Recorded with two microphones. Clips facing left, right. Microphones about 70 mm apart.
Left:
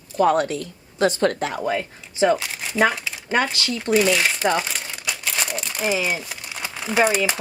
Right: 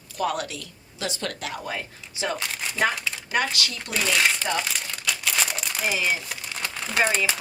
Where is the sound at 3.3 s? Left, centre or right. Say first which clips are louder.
Left 4 dB; left.